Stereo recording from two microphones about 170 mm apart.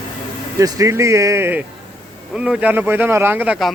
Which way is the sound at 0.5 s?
20° right (ahead or behind).